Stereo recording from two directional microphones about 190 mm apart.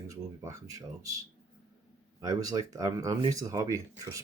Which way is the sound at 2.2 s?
20° right (ahead or behind).